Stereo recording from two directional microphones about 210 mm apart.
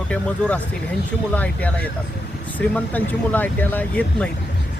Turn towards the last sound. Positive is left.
turn(degrees=5)  # may be behind; listen again after turning